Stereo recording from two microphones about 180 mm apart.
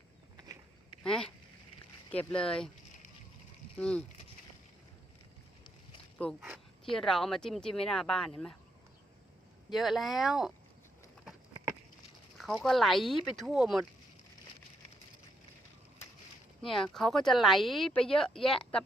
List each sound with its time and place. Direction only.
1.0 s speech: 5° left (ahead or behind)
3.8 s speech: 5° left (ahead or behind)
6.4 s speech: centre (ahead or behind)
9.7 s speech: centre (ahead or behind)
12.4 s speech: 5° left (ahead or behind)
16.6 s speech: centre (ahead or behind)